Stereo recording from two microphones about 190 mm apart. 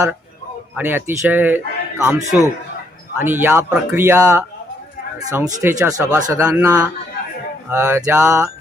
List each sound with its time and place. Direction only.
0.8 s speech: 10° right (ahead or behind)
5.6 s speech: 15° right (ahead or behind)